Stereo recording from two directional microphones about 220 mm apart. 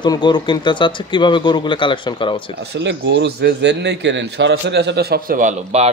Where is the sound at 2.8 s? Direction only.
55° right (ahead or behind).